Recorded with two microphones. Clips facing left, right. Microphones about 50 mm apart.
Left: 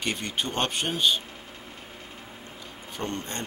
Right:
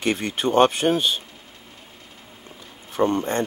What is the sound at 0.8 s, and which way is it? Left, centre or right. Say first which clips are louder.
Speech: right 11 dB; right.